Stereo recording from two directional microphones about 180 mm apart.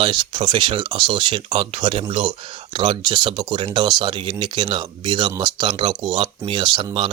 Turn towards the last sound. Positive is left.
turn(degrees=-25)  # may be behind; listen again after turning